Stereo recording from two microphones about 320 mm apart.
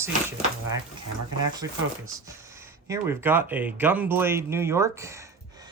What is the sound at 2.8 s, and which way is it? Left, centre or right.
Speech, centre.